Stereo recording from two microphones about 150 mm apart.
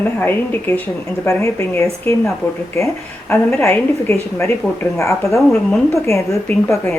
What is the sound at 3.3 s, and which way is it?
A woman's voice, 15° left (ahead or behind).